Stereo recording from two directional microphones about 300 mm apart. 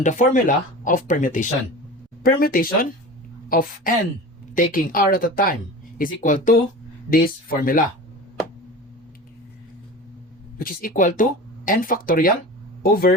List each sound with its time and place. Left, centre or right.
0.0 s speech: left
10.6 s speech: left